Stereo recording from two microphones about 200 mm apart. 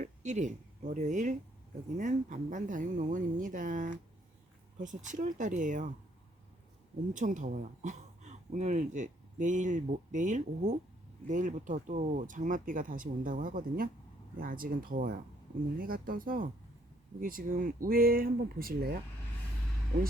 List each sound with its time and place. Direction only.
0.0 s speech: 35° right (ahead or behind)
7.1 s speech: 40° right (ahead or behind)